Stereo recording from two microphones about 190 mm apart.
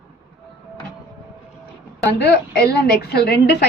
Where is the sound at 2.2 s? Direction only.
60° left (ahead or behind).